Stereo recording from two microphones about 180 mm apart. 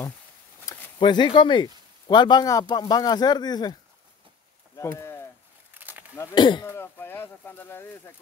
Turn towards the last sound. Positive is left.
turn(degrees=10)  # may be behind; listen again after turning